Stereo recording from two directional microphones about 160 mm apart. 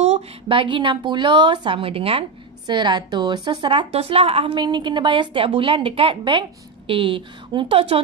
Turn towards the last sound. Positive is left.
turn(degrees=-35)  # may be behind; listen again after turning